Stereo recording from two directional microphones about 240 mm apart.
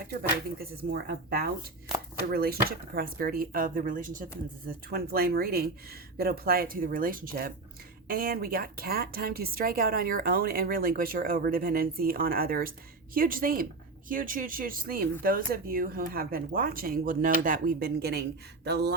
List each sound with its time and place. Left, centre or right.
0.1 s speech: right